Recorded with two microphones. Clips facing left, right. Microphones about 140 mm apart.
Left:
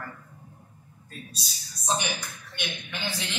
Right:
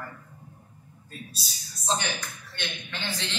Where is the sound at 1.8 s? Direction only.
15° left (ahead or behind).